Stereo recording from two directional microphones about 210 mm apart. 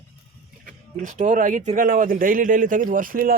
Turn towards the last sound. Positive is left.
turn(degrees=-45)  # may be behind; listen again after turning